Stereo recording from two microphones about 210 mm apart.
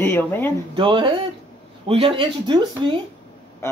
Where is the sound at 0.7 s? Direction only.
25° right (ahead or behind).